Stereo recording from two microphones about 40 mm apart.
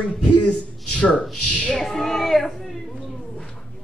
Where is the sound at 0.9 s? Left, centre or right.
Left.